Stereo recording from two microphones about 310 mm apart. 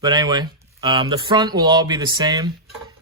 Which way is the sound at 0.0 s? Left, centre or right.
Centre.